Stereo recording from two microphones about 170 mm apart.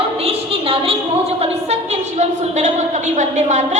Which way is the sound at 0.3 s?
35° right (ahead or behind).